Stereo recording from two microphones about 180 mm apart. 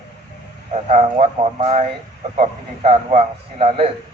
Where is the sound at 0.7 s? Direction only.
35° right (ahead or behind).